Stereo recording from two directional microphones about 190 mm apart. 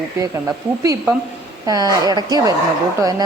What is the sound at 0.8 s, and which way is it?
A woman's voice, 15° right (ahead or behind).